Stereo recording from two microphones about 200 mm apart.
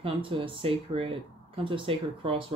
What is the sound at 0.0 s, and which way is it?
Speech, 25° right (ahead or behind).